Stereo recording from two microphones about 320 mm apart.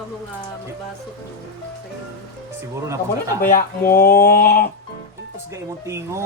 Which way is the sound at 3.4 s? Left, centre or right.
Left.